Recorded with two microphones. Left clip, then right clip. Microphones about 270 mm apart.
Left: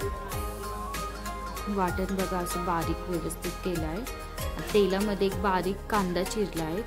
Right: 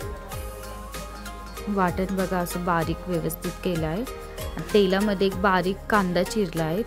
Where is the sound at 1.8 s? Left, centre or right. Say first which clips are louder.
Right 5 dB; centre.